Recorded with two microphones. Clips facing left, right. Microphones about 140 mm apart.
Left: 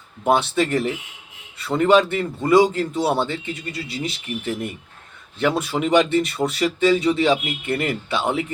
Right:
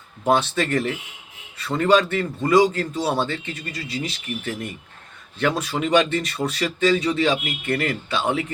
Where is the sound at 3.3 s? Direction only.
20° left (ahead or behind).